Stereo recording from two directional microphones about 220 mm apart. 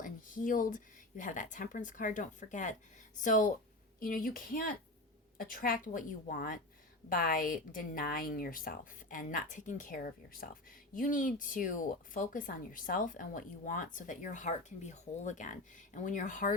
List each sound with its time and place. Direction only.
0.0 s a woman's voice: 35° left (ahead or behind)